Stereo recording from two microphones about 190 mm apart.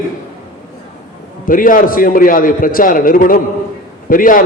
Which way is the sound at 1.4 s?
45° left (ahead or behind).